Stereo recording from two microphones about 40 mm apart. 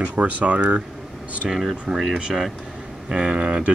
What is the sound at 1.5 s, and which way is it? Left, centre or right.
Speech, centre.